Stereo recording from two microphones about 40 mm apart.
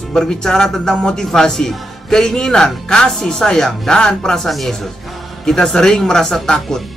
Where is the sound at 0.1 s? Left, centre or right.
Centre.